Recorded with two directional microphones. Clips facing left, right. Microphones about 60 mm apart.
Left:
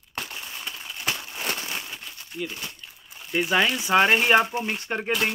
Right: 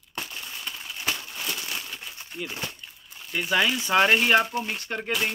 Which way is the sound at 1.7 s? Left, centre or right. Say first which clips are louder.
Left 1 dB; left.